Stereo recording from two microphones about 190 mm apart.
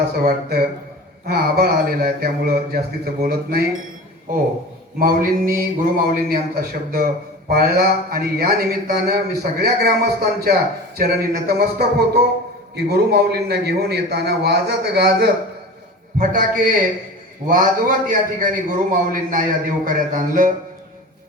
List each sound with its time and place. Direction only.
0.2 s a man's voice: 55° right (ahead or behind)
4.9 s a man's voice: 50° right (ahead or behind)
16.1 s a man's voice: 45° right (ahead or behind)